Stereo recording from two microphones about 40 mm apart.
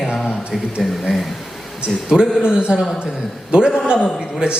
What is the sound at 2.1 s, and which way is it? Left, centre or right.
Speech, centre.